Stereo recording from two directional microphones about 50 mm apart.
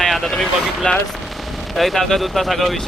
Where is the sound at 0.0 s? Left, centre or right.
Centre.